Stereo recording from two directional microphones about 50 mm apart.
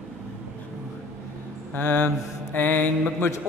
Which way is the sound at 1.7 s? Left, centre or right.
Left.